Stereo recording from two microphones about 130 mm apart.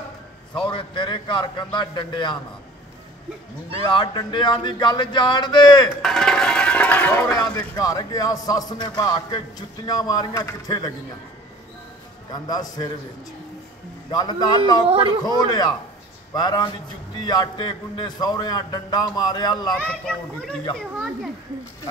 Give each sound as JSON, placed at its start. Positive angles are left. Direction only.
{"t": 0.6, "sound": "a man's voice", "side_deg": 40}
{"t": 3.9, "sound": "a man's voice", "side_deg": 35}
{"t": 6.0, "sound": "music", "side_deg": 5}
{"t": 7.2, "sound": "a man's voice", "side_deg": 30}
{"t": 12.3, "sound": "a man's voice", "side_deg": 30}
{"t": 14.1, "sound": "a man's voice", "side_deg": 30}
{"t": 19.9, "sound": "a child's voice", "side_deg": 5}